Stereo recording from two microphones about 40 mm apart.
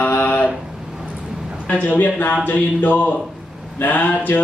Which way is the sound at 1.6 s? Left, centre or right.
Left.